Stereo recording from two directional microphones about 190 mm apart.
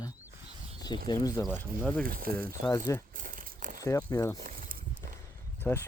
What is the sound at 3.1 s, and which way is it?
Crumpling, 45° right (ahead or behind).